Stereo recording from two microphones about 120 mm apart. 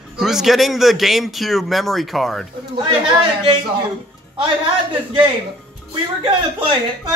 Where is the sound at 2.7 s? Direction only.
40° right (ahead or behind).